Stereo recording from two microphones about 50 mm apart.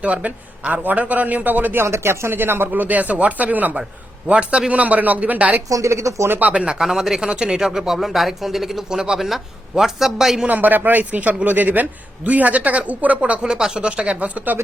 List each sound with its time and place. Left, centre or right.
0.0 s a man's voice: right
2.4 s speech: right
2.8 s a man's voice: right
5.8 s speech: right
6.4 s speech: right
10.5 s a man's voice: right
13.4 s speech: centre; by 14.6 s right